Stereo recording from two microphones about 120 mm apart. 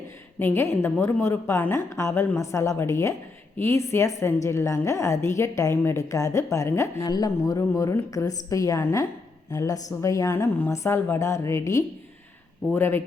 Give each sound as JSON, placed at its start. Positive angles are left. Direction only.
{"t": 0.3, "sound": "a woman's voice", "side_deg": 20}